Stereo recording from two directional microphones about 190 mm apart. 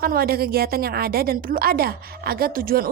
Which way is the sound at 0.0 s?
50° right (ahead or behind).